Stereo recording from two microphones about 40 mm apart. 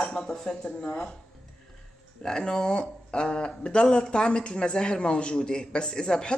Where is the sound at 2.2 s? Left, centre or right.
Centre.